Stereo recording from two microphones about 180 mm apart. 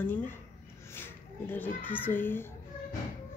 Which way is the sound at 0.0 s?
10° left (ahead or behind).